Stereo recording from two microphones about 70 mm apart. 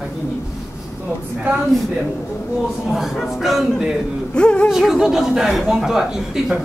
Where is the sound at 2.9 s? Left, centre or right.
Centre.